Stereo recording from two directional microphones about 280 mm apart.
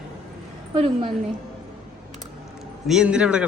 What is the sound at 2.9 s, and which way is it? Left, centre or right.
Speech, centre.